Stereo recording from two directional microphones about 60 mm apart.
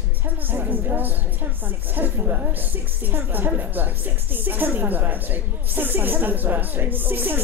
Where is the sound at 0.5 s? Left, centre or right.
Right.